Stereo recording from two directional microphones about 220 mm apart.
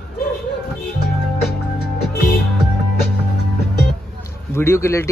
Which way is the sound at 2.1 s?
45° left (ahead or behind).